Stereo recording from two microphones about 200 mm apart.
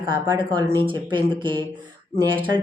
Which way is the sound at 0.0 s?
25° right (ahead or behind).